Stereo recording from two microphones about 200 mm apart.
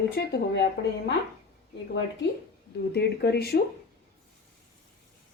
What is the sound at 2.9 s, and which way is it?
Speech, 55° left (ahead or behind).